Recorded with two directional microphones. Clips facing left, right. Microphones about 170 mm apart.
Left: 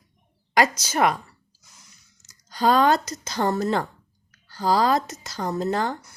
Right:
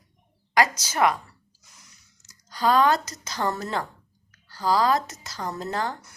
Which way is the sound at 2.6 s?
30° left (ahead or behind).